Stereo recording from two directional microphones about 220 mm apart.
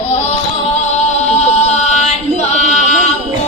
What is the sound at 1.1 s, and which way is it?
Singing, 30° left (ahead or behind).